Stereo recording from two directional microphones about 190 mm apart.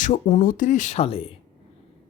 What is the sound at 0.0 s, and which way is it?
Speech, 40° left (ahead or behind).